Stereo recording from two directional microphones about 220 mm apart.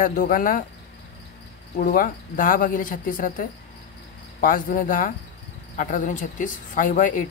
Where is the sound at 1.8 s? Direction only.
40° left (ahead or behind).